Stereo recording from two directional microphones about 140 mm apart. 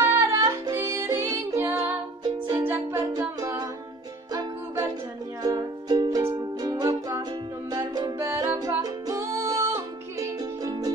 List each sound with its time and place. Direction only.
0.0 s music: 20° right (ahead or behind)
2.2 s music: 30° right (ahead or behind)
2.5 s music: 15° right (ahead or behind)
3.1 s music: 25° right (ahead or behind)
8.2 s music: 20° right (ahead or behind)